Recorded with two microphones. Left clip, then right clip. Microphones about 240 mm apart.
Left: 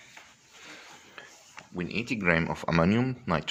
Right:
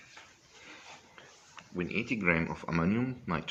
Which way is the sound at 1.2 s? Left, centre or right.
Left.